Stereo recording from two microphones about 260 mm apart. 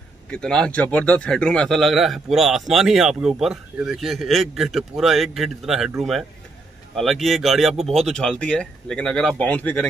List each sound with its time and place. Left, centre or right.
0.3 s a man's voice: centre